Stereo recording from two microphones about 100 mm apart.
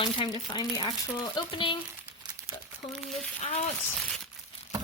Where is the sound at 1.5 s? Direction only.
55° left (ahead or behind).